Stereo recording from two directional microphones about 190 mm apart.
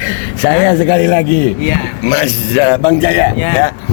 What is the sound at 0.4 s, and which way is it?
Speech, 25° left (ahead or behind).